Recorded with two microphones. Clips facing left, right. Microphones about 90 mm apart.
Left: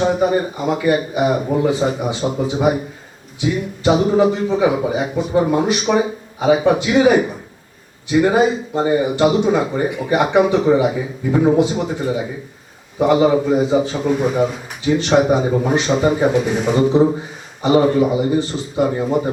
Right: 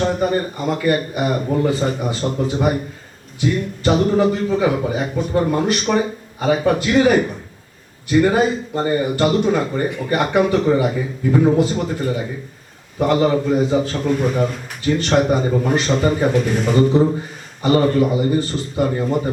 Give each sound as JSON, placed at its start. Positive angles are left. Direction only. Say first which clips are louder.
{"t": 0.0, "sound": "a man's voice", "louder": "left 2 dB", "side_deg": 5}